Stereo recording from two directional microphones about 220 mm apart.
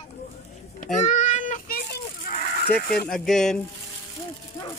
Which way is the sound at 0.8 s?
35° left (ahead or behind).